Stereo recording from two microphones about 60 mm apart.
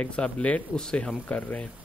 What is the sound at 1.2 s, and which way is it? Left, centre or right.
Speech, left.